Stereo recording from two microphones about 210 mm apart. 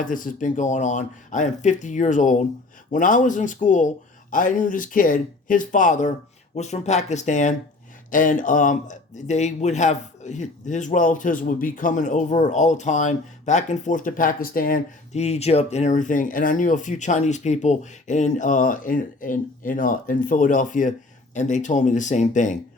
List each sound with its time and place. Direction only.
0.0 s speech: 40° left (ahead or behind)